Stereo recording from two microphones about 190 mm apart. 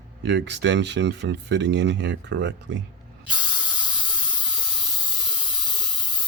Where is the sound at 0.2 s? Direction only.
65° right (ahead or behind).